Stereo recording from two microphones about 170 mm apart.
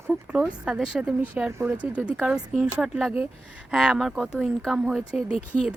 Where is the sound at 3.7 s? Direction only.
5° right (ahead or behind).